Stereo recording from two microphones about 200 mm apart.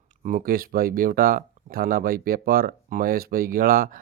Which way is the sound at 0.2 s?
40° right (ahead or behind).